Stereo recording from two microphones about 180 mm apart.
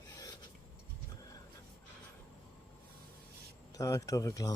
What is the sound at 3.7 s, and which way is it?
Speech, 20° left (ahead or behind).